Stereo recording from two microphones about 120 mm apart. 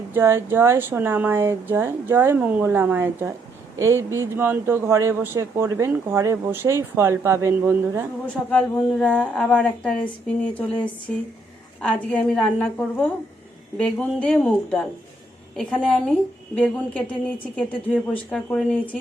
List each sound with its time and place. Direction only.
0.1 s speech: 20° right (ahead or behind)
8.4 s a woman's voice: 10° left (ahead or behind)